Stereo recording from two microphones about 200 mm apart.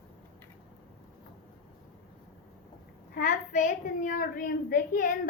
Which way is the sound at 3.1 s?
40° left (ahead or behind).